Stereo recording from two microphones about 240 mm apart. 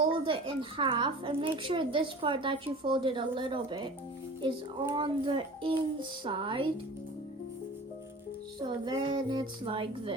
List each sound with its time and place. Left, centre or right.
0.0 s speech: right
8.8 s speech: centre